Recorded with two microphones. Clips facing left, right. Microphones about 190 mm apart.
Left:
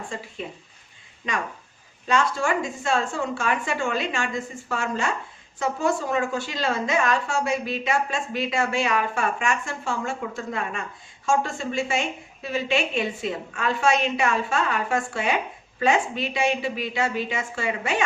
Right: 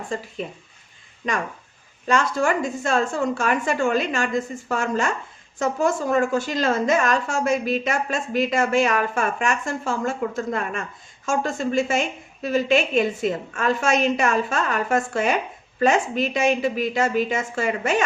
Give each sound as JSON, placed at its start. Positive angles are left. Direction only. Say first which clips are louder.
{"t": 2.0, "sound": "a woman's voice", "louder": "right 2 dB", "side_deg": -45}